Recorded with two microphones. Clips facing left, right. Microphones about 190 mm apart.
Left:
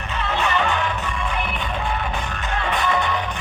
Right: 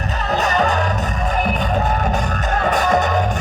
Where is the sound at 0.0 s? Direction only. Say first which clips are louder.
Right 4 dB; 40° right (ahead or behind).